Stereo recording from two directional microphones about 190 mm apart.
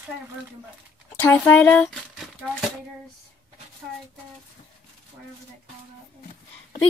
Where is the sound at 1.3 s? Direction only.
10° left (ahead or behind).